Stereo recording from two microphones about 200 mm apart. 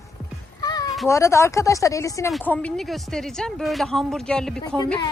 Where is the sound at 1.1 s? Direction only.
15° left (ahead or behind).